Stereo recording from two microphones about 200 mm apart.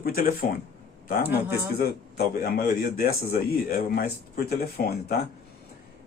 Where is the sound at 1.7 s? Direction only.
50° left (ahead or behind).